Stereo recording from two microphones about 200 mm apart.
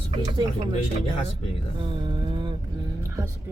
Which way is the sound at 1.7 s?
25° right (ahead or behind).